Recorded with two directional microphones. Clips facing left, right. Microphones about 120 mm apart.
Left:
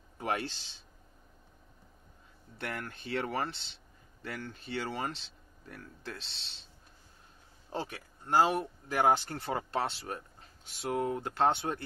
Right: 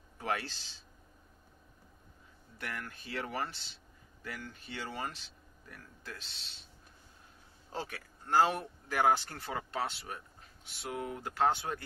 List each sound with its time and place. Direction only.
0.2 s a man's voice: 20° left (ahead or behind)
2.5 s speech: 25° left (ahead or behind)
7.7 s speech: 20° left (ahead or behind)
9.5 s speech: 35° left (ahead or behind)